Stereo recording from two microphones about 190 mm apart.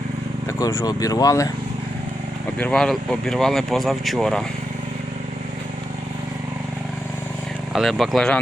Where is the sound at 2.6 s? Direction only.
5° left (ahead or behind).